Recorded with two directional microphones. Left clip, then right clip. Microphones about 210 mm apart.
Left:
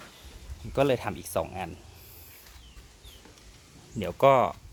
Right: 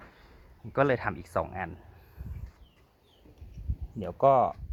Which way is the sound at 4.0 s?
15° left (ahead or behind).